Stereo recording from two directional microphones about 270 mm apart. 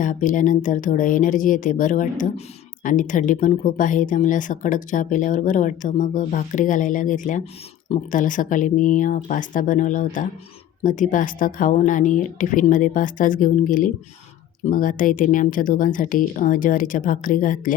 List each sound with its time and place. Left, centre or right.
0.0 s speech: left